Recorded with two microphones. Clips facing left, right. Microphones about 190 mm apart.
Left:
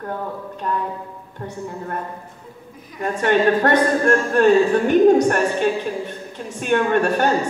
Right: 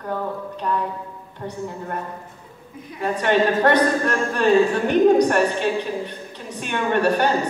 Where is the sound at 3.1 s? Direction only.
50° left (ahead or behind).